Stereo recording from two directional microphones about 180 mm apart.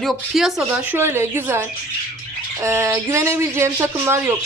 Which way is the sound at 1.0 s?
15° right (ahead or behind).